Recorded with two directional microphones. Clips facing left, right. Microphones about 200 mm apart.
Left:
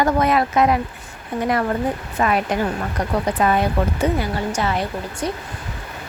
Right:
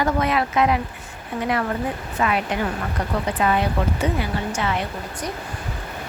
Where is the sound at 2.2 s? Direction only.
40° left (ahead or behind).